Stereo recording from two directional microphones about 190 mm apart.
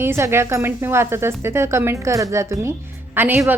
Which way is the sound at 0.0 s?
15° right (ahead or behind).